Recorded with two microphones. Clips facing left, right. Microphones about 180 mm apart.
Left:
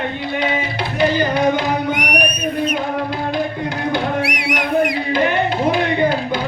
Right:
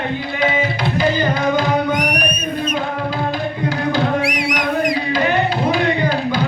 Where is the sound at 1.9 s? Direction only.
65° left (ahead or behind).